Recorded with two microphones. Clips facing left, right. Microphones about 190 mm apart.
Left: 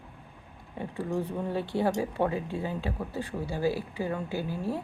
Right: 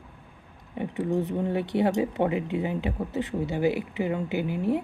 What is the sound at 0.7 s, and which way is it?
Speech, 20° right (ahead or behind).